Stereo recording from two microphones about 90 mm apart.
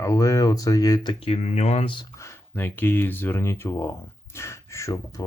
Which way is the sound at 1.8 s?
65° left (ahead or behind).